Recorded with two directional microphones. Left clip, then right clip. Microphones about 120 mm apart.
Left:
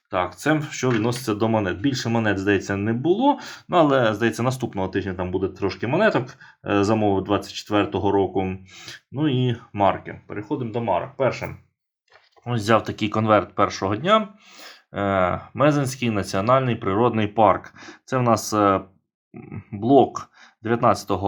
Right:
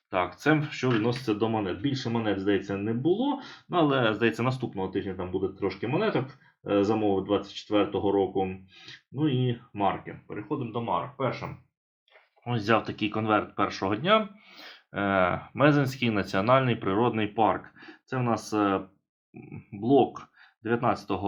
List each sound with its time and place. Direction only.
0.1 s speech: 25° left (ahead or behind)
1.0 s speech: 50° left (ahead or behind)
1.5 s speech: 90° left
3.8 s speech: 35° left (ahead or behind)
4.6 s speech: 90° left
12.5 s speech: 30° left (ahead or behind)
13.7 s speech: 30° left (ahead or behind)
17.0 s speech: 40° left (ahead or behind)
19.8 s speech: 55° left (ahead or behind)
20.7 s speech: 45° left (ahead or behind)